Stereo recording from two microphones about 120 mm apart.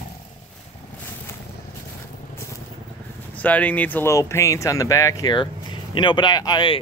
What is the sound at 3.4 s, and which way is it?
Speech, 10° left (ahead or behind).